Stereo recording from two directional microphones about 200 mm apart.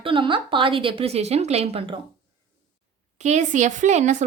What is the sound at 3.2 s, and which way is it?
Speech, 35° right (ahead or behind).